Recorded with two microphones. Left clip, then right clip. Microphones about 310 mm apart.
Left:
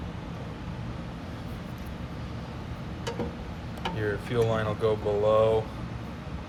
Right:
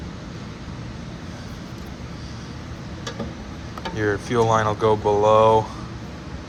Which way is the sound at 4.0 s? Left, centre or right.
Centre.